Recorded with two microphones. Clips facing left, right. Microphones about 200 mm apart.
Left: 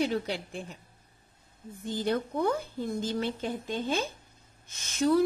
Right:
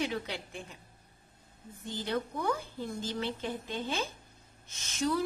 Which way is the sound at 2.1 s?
50° left (ahead or behind).